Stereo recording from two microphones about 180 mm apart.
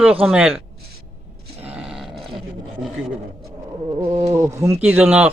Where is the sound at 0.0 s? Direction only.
5° right (ahead or behind).